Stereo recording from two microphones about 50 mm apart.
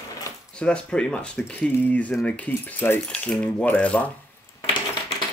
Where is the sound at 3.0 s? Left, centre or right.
Centre.